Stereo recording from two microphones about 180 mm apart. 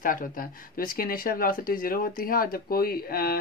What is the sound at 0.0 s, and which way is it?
Speech, 50° left (ahead or behind).